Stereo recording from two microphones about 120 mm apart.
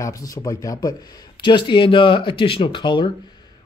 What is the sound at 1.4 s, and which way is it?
A man's voice, 40° left (ahead or behind).